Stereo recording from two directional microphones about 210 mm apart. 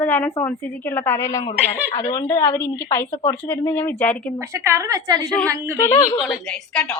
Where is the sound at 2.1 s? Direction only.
10° left (ahead or behind).